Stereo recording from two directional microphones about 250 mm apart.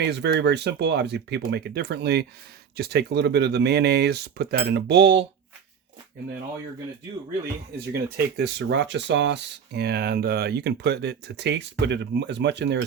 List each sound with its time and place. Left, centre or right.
0.0 s speech: right
7.9 s speech: right